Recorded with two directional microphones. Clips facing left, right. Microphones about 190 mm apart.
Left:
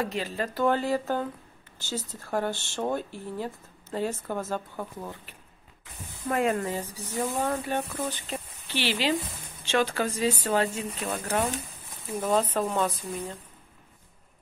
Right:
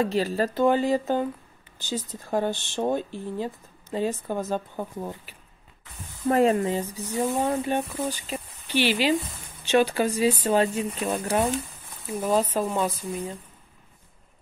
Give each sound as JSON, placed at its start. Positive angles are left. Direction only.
{"t": 0.0, "sound": "speech", "side_deg": -35}
{"t": 0.6, "sound": "speech", "side_deg": -15}
{"t": 6.2, "sound": "speech", "side_deg": -35}
{"t": 6.5, "sound": "speech", "side_deg": -20}